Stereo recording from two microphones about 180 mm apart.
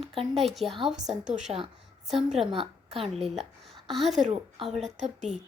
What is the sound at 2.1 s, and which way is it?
Speech, 35° right (ahead or behind).